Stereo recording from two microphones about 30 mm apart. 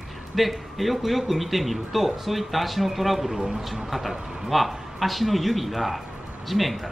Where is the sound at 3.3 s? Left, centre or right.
Right.